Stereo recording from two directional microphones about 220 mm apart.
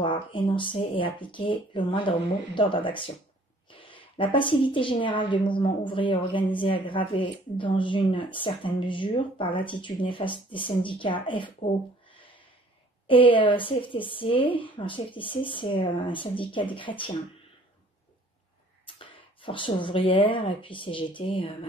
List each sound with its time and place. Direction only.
0.0 s a woman's voice: 20° left (ahead or behind)
13.0 s a woman's voice: 25° left (ahead or behind)
18.9 s a woman's voice: 25° left (ahead or behind)